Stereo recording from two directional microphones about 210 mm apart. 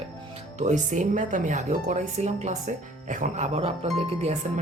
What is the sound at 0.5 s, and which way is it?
Speech, 35° right (ahead or behind).